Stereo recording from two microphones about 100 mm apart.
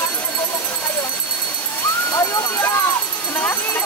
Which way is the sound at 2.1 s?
30° left (ahead or behind).